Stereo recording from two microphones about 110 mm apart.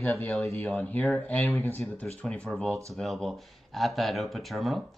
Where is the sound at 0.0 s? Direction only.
25° left (ahead or behind).